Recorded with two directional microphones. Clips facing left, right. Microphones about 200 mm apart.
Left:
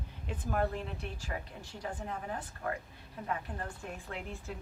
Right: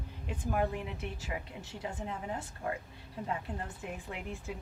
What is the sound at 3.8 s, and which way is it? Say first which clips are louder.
Speech: right 1 dB; 10° right (ahead or behind).